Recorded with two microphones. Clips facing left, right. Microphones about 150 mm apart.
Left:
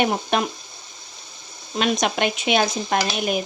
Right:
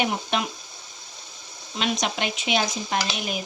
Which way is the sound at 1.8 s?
55° left (ahead or behind).